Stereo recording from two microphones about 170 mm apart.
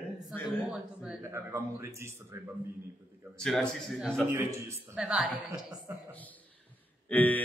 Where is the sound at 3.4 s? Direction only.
Centre (ahead or behind); by 4.8 s 15° right (ahead or behind).